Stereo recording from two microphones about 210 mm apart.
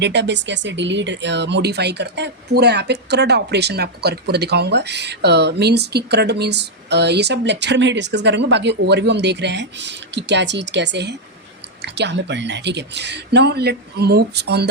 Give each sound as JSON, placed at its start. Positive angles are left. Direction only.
{"t": 0.0, "sound": "speech", "side_deg": -55}